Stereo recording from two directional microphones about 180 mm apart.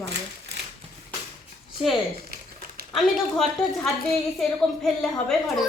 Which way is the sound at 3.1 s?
Centre (ahead or behind).